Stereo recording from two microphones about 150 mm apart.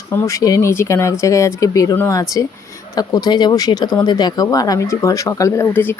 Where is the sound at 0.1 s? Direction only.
20° left (ahead or behind).